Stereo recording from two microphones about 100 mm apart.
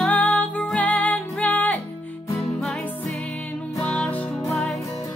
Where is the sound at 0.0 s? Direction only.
15° left (ahead or behind).